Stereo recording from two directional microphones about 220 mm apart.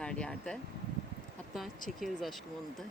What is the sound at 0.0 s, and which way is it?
Speech, 5° left (ahead or behind).